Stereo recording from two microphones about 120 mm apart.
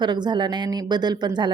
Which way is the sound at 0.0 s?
40° right (ahead or behind).